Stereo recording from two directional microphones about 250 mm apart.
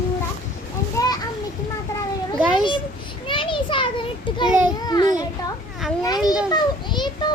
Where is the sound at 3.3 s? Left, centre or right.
Centre.